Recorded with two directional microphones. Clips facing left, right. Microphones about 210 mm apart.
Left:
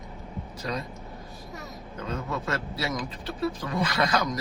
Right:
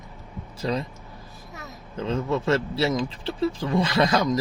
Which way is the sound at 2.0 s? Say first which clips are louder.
Right 7 dB; 25° right (ahead or behind).